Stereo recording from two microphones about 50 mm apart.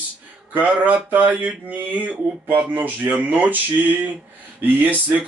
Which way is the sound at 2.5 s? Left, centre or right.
Right.